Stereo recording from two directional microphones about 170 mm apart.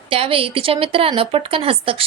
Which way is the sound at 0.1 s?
35° right (ahead or behind).